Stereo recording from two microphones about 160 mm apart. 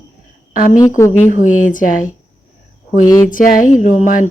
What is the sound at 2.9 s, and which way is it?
Speech, 55° left (ahead or behind).